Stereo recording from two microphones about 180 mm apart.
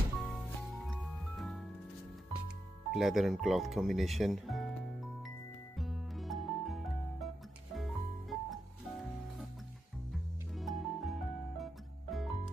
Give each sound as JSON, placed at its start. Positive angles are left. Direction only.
{"t": 0.2, "sound": "music", "side_deg": 0}
{"t": 2.9, "sound": "speech", "side_deg": 0}
{"t": 5.8, "sound": "music", "side_deg": 0}